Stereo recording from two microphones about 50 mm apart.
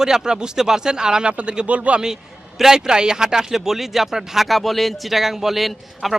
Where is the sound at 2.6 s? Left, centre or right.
Centre.